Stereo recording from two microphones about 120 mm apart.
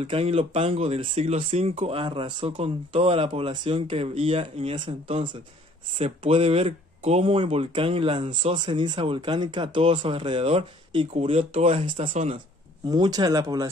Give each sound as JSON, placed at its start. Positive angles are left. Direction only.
{"t": 0.0, "sound": "speech", "side_deg": -55}
{"t": 5.9, "sound": "speech", "side_deg": -55}
{"t": 12.1, "sound": "speech", "side_deg": -75}
{"t": 12.9, "sound": "speech", "side_deg": -35}